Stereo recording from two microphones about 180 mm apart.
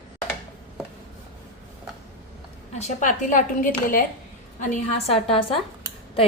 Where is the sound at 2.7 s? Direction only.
40° left (ahead or behind).